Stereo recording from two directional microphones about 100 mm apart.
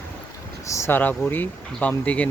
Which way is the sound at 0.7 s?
25° left (ahead or behind).